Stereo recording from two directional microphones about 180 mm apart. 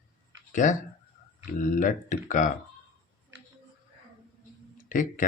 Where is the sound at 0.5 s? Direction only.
45° left (ahead or behind).